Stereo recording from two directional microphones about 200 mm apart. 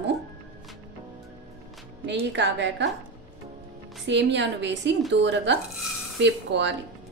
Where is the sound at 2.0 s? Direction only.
60° right (ahead or behind).